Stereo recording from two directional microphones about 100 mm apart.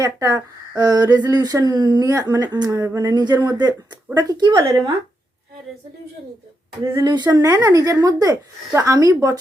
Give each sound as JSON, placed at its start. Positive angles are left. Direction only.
{"t": 0.0, "sound": "speech", "side_deg": -35}
{"t": 7.0, "sound": "speech", "side_deg": -45}
{"t": 7.3, "sound": "speech", "side_deg": -35}